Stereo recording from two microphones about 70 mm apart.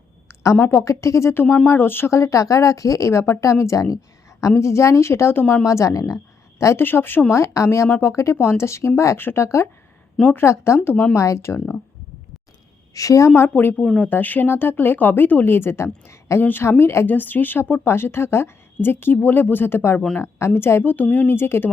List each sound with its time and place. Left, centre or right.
0.7 s speech: left
1.3 s speech: left
2.0 s speech: left
4.6 s speech: left
5.6 s speech: left
6.7 s speech: left
7.3 s speech: left
12.9 s speech: left
13.5 s speech: left
13.7 s speech: centre
14.0 s speech: left
17.1 s speech: left
20.9 s speech: left